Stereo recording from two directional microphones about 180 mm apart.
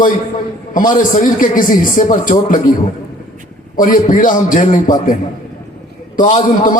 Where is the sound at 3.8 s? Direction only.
50° left (ahead or behind).